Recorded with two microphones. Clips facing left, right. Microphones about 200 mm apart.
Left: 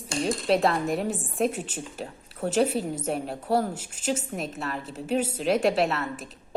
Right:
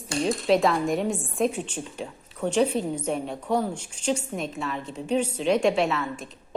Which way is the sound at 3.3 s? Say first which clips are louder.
Left 2 dB; 35° left (ahead or behind).